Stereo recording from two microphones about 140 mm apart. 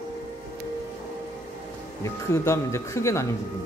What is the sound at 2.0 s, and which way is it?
Speech, 20° left (ahead or behind).